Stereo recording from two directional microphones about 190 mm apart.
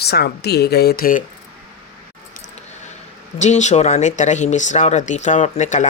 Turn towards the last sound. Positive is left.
turn(degrees=40)  # may be behind; listen again after turning